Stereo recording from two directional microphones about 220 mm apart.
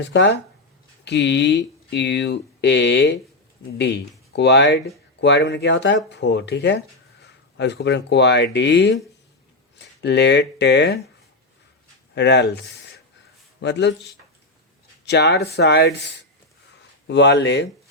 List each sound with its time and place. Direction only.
0.1 s speech: 55° left (ahead or behind)
12.1 s speech: 50° left (ahead or behind)
15.0 s speech: 50° left (ahead or behind)